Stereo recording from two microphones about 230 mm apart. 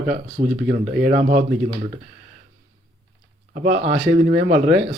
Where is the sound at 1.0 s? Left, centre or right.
Right.